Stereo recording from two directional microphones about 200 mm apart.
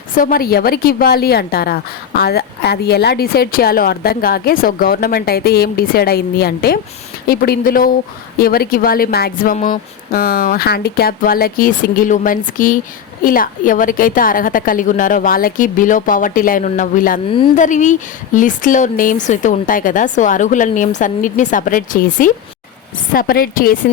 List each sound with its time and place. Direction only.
0.1 s a woman's voice: 45° left (ahead or behind)